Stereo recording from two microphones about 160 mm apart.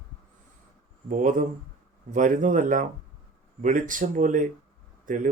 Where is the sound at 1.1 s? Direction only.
55° right (ahead or behind).